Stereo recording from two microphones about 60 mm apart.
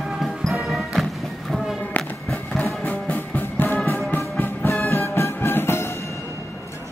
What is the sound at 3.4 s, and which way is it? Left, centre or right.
Music, left.